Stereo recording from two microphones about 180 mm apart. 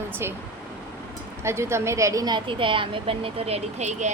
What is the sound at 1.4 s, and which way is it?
Speech, 15° right (ahead or behind).